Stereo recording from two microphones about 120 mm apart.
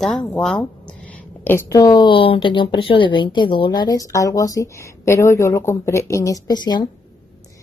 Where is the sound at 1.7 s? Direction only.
30° left (ahead or behind).